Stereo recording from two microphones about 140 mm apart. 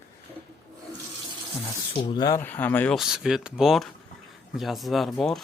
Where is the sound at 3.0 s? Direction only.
5° right (ahead or behind).